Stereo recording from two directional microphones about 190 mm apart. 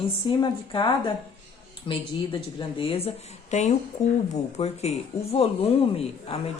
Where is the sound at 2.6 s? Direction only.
30° left (ahead or behind).